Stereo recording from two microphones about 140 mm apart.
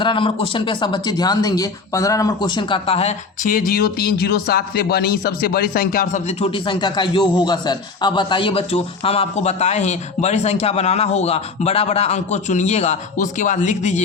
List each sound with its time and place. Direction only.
0.0 s speech: 35° left (ahead or behind); by 3.6 s 60° left (ahead or behind)
3.7 s speech: 90° left; by 6.3 s 65° left (ahead or behind)
6.4 s a man's voice: 35° left (ahead or behind); by 14.0 s 55° left (ahead or behind)